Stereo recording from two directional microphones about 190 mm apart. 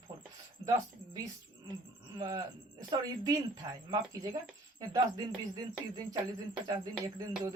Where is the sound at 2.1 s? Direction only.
20° right (ahead or behind).